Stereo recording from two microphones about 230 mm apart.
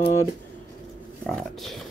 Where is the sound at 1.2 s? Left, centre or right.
Centre.